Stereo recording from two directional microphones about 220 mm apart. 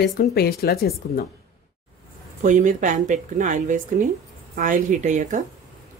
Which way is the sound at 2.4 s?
35° right (ahead or behind).